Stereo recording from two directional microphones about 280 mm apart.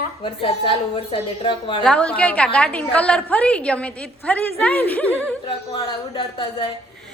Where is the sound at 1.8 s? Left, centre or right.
Centre.